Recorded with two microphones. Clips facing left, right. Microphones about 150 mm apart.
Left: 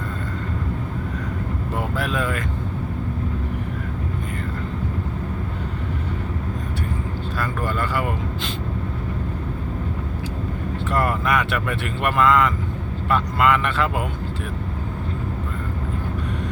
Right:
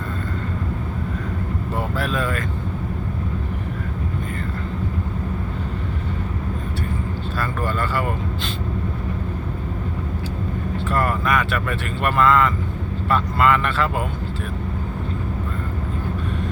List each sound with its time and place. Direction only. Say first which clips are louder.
2.0 s speech: right 1 dB; 15° left (ahead or behind)
7.3 s speech: right 1 dB; 15° left (ahead or behind)
10.8 s speech: even; 20° left (ahead or behind)